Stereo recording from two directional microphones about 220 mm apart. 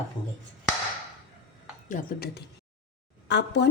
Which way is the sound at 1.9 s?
40° left (ahead or behind).